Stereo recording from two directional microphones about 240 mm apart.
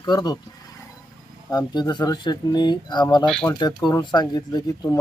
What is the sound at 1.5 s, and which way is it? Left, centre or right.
Speech, centre.